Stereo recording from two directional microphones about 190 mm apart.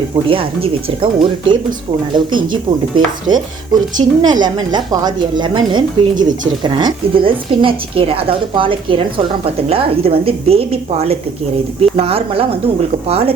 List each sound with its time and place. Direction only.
0.3 s a woman's voice: 30° right (ahead or behind)